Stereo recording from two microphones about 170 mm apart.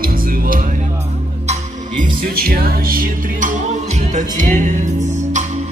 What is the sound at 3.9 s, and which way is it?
Music, 45° right (ahead or behind).